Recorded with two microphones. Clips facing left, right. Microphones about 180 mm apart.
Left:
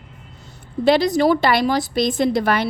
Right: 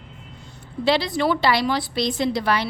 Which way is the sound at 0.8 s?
45° left (ahead or behind).